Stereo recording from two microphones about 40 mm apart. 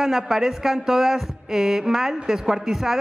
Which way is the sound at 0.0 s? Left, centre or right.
Centre.